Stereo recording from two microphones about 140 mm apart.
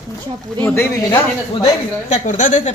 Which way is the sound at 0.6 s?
15° left (ahead or behind).